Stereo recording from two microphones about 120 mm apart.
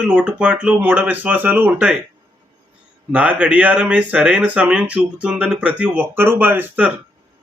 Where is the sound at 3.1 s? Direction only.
10° right (ahead or behind).